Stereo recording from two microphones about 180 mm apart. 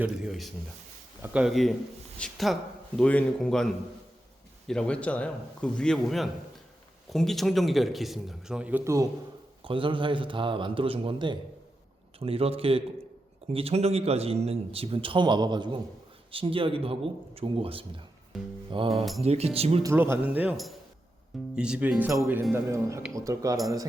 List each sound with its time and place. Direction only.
0.0 s a man's voice: 5° right (ahead or behind)
4.7 s a man's voice: 5° left (ahead or behind); by 9.0 s 15° right (ahead or behind)
9.6 s a man's voice: 30° right (ahead or behind)
18.3 s music: centre (ahead or behind)
18.7 s a man's voice: 30° right (ahead or behind)
19.8 s speech: 15° right (ahead or behind)